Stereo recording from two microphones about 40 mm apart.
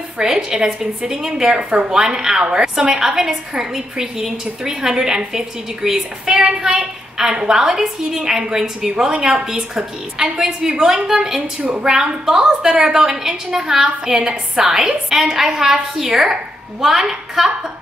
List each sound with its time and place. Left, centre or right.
0.2 s a woman's voice: centre
1.6 s a woman's voice: right
1.9 s a woman's voice: centre